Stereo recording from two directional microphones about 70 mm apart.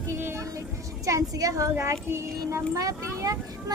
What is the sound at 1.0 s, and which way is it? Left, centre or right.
Speech, right.